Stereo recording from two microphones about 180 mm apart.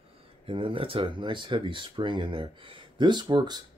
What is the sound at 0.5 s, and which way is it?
Speech, 30° right (ahead or behind).